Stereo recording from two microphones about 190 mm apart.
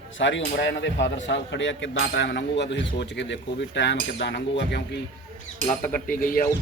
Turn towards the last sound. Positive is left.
turn(degrees=45)  # may be behind; listen again after turning